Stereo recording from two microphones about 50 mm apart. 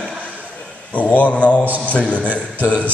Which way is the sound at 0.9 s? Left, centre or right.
Left.